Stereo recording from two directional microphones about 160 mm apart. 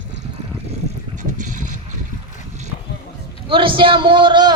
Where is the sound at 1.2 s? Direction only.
50° right (ahead or behind).